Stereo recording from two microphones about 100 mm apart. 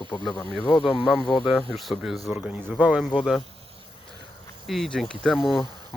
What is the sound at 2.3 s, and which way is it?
Speech, 15° right (ahead or behind).